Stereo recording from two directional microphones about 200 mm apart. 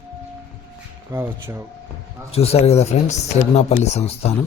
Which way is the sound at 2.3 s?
30° left (ahead or behind).